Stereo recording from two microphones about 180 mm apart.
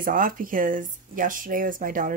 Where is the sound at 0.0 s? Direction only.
50° right (ahead or behind).